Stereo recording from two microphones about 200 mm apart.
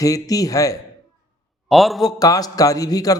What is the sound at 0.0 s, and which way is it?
Speech, 15° left (ahead or behind).